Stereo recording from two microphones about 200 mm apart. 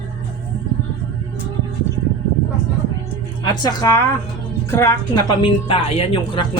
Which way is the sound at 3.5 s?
20° left (ahead or behind).